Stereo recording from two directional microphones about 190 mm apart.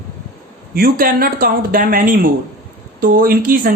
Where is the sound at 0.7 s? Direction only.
50° right (ahead or behind).